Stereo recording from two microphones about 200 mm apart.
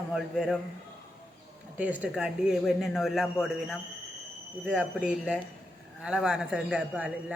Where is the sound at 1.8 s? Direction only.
10° right (ahead or behind).